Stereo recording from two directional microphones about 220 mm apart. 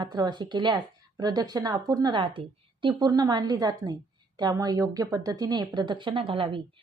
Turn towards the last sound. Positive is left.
turn(degrees=-25)  # may be behind; listen again after turning